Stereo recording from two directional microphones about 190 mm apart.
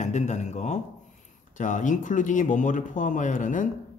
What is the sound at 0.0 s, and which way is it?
Speech, 40° left (ahead or behind).